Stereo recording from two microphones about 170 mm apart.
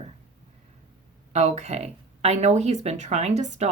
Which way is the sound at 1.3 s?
40° right (ahead or behind).